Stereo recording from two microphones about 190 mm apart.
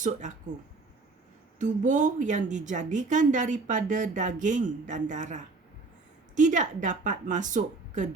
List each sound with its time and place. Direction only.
0.0 s a woman's voice: 40° right (ahead or behind)
1.5 s a woman's voice: 40° right (ahead or behind)